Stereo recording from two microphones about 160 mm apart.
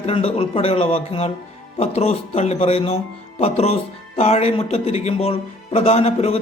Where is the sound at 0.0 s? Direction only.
35° left (ahead or behind).